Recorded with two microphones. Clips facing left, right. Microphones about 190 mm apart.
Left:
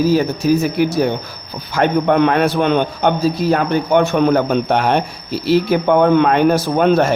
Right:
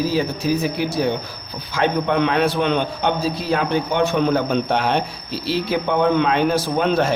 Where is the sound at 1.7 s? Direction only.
50° left (ahead or behind).